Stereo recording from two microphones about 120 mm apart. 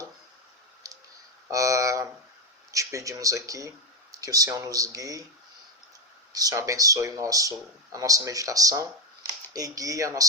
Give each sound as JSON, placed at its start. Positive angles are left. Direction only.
{"t": 1.5, "sound": "a sound", "side_deg": -25}
{"t": 2.7, "sound": "speech", "side_deg": -25}
{"t": 6.3, "sound": "speech", "side_deg": -30}